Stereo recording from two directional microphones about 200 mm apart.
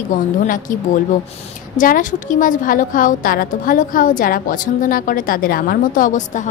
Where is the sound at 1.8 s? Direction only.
40° left (ahead or behind).